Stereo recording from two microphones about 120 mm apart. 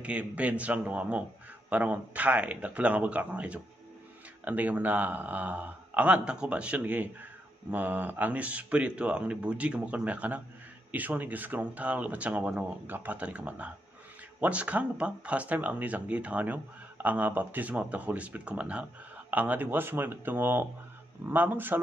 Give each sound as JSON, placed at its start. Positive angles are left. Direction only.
{"t": 0.0, "sound": "speech", "side_deg": -10}